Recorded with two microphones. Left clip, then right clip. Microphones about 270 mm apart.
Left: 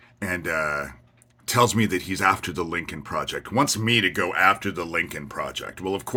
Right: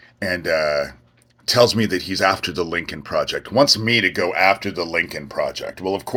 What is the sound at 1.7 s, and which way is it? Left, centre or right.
Speech, centre.